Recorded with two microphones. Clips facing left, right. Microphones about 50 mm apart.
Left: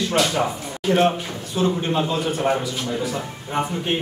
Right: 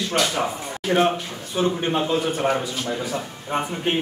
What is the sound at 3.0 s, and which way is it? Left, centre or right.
Speech, right.